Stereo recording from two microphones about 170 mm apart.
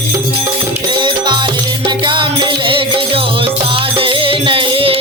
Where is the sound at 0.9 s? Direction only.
25° right (ahead or behind).